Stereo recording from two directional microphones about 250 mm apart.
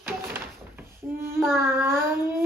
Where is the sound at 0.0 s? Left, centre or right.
Centre.